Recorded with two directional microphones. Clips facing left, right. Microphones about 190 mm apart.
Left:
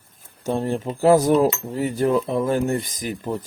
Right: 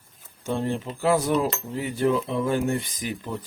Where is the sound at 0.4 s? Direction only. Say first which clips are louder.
Left 4 dB; 40° left (ahead or behind).